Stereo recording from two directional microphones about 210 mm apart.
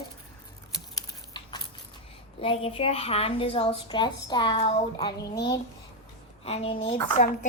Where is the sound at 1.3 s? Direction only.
20° left (ahead or behind).